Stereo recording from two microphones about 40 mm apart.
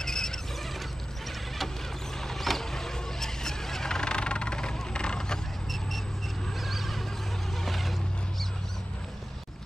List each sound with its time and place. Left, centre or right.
0.0 s squeal: centre
2.2 s vehicle: centre; by 5.4 s left
6.6 s neigh: centre
7.6 s a sound: centre